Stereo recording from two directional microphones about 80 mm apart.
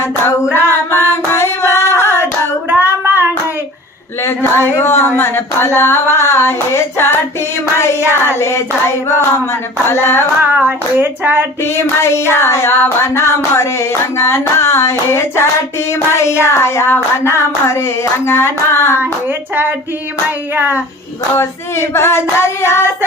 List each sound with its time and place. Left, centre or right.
0.5 s a sound: left
2.6 s child singing: right
4.2 s child singing: left
8.4 s child singing: left
9.8 s female singing: left
10.4 s hands: right
11.6 s child singing: left
20.6 s hands: right
21.3 s child singing: left